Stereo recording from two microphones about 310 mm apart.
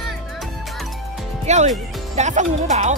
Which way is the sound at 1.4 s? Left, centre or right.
Right.